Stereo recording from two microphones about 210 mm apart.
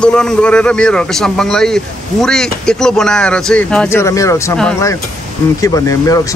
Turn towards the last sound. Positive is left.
turn(degrees=15)  # may be behind; listen again after turning